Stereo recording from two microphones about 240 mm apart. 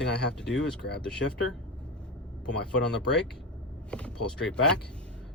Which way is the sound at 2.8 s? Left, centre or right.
Left.